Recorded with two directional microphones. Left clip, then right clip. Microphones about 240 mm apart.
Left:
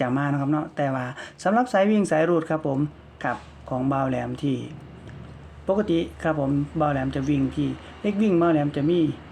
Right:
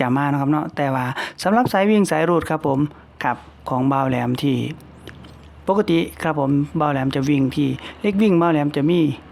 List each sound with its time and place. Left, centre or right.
0.0 s speech: right